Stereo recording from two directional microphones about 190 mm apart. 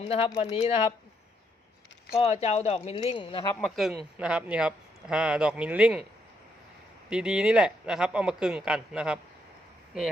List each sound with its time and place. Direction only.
0.0 s speech: 30° left (ahead or behind)
2.1 s speech: 35° left (ahead or behind)
3.6 s speech: centre (ahead or behind)
7.1 s speech: 5° right (ahead or behind)